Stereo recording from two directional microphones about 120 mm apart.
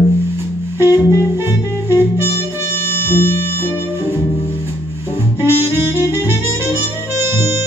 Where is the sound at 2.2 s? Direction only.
20° left (ahead or behind).